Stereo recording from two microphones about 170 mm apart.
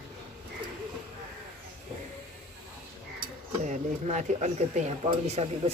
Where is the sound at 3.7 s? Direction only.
45° right (ahead or behind).